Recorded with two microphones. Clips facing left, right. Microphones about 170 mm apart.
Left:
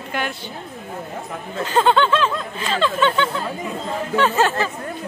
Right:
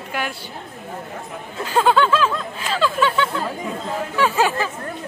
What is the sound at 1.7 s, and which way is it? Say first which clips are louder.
Speech: even; 5° right (ahead or behind).